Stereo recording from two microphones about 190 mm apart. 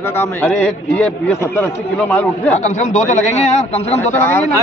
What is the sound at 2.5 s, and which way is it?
Speech, 40° left (ahead or behind).